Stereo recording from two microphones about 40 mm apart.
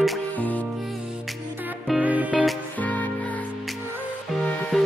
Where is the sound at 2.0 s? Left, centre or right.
Right.